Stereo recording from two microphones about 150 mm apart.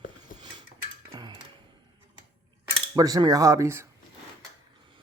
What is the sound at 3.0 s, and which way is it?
Speech, 25° right (ahead or behind).